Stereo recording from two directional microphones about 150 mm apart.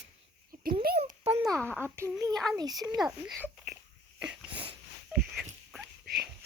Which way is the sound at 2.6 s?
25° right (ahead or behind).